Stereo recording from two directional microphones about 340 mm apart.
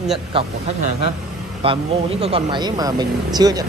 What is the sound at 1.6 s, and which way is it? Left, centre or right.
Speech, centre.